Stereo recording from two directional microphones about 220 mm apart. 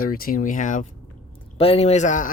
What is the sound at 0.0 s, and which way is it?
A man's voice, 40° left (ahead or behind).